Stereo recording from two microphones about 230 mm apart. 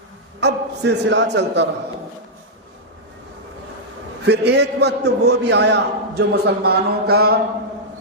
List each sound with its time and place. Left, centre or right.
0.3 s a man's voice: right
4.2 s a man's voice: right